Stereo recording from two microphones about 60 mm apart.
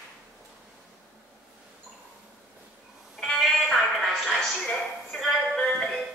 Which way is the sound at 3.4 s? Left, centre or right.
Centre.